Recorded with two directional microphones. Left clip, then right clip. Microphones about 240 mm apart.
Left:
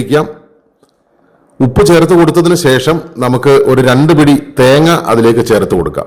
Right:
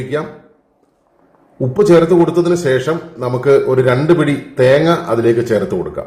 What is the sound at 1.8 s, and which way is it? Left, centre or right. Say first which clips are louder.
A man's voice: left 3 dB; left.